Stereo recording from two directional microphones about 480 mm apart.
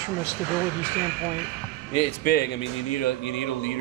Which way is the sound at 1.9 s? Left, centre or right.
Centre.